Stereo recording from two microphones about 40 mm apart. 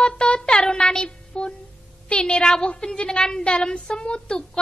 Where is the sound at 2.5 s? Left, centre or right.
Left.